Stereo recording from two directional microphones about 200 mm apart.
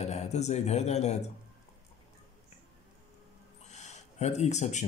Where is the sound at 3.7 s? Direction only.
35° left (ahead or behind).